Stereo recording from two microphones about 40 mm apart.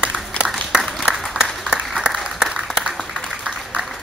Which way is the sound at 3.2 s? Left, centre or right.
Right.